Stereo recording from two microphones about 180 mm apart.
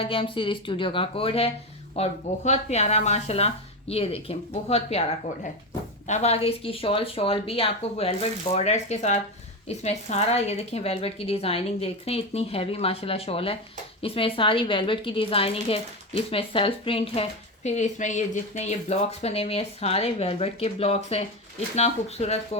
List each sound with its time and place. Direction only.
0.0 s a woman's voice: 30° left (ahead or behind)